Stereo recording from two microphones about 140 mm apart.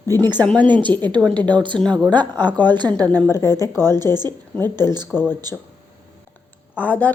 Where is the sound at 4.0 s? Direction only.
30° right (ahead or behind).